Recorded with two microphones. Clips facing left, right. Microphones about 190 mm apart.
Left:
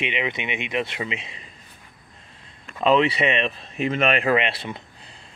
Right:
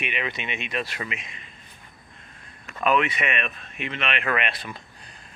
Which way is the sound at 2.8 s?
25° left (ahead or behind).